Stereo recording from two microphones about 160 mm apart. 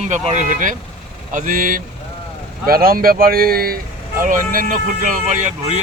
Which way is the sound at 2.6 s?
65° right (ahead or behind).